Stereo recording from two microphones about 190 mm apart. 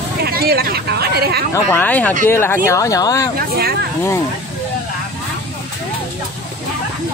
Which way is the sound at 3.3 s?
55° right (ahead or behind).